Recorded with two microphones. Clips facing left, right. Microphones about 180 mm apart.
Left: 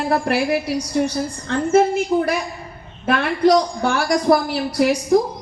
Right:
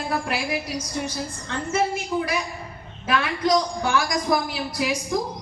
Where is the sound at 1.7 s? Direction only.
55° left (ahead or behind).